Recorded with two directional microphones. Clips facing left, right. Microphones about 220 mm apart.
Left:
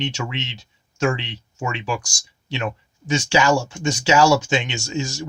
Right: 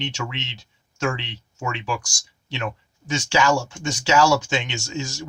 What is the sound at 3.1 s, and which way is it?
Speech, 15° left (ahead or behind).